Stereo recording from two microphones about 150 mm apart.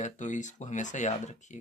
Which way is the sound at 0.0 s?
55° left (ahead or behind).